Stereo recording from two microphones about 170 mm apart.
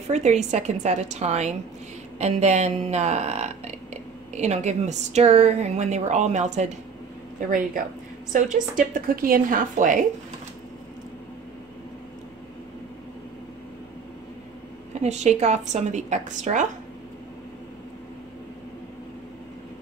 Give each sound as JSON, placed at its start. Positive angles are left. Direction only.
{"t": 0.1, "sound": "a woman's voice", "side_deg": -40}
{"t": 15.0, "sound": "a woman's voice", "side_deg": -40}